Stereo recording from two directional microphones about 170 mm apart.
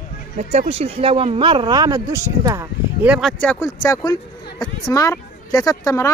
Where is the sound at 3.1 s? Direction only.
5° left (ahead or behind).